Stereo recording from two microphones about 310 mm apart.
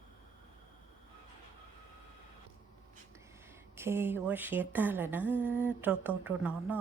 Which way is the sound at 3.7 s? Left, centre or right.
Centre.